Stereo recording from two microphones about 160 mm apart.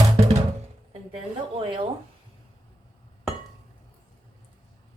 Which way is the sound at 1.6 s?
35° right (ahead or behind).